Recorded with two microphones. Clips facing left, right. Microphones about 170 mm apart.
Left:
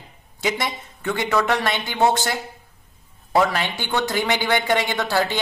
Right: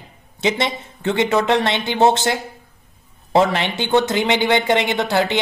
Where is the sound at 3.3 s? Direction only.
25° right (ahead or behind).